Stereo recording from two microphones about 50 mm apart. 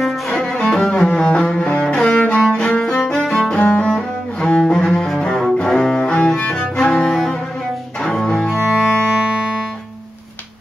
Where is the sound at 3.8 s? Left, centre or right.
Centre.